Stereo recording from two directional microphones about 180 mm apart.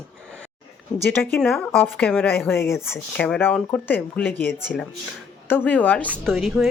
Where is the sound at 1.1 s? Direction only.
5° left (ahead or behind).